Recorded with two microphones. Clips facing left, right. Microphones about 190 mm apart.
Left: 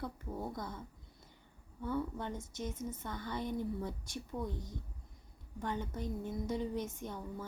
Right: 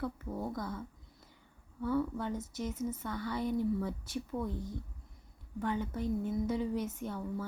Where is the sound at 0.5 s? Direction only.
25° left (ahead or behind).